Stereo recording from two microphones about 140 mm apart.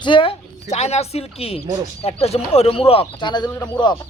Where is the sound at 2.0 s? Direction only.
45° left (ahead or behind).